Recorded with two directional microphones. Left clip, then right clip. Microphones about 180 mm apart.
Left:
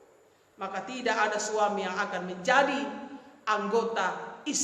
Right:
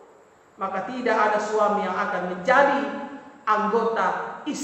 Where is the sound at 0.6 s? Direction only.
55° left (ahead or behind).